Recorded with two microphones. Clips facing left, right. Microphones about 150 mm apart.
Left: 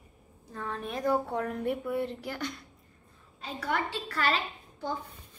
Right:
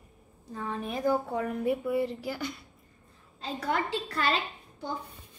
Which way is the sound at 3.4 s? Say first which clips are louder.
Right 2 dB; 30° right (ahead or behind).